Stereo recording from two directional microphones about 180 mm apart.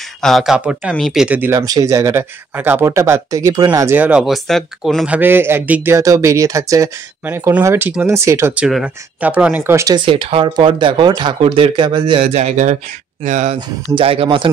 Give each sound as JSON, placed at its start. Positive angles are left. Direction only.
{"t": 0.2, "sound": "speech", "side_deg": 0}
{"t": 8.6, "sound": "speech", "side_deg": -5}
{"t": 13.6, "sound": "speech", "side_deg": -30}